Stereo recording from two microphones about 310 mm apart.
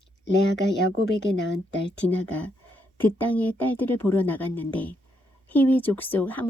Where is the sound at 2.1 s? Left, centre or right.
Centre.